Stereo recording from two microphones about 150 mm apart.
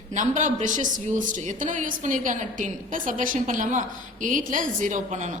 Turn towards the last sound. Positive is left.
turn(degrees=-55)  # may be behind; listen again after turning